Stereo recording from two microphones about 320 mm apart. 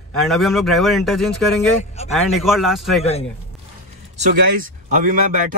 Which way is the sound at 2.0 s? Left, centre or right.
Centre.